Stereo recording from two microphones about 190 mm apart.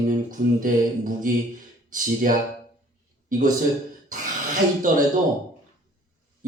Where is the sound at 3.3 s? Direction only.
45° right (ahead or behind).